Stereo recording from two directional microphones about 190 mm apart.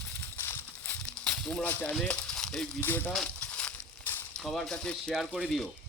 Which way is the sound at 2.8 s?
10° left (ahead or behind).